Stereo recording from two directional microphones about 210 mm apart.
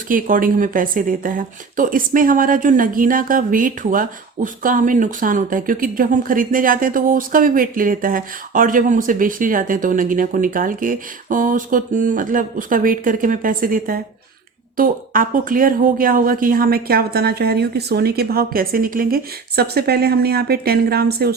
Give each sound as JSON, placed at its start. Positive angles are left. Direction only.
{"t": 0.1, "sound": "speech", "side_deg": -40}